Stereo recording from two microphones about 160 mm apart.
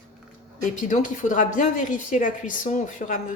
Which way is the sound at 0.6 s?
50° left (ahead or behind).